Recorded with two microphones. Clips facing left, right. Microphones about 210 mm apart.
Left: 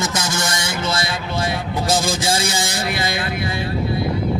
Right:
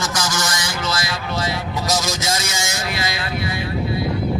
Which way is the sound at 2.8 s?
55° left (ahead or behind).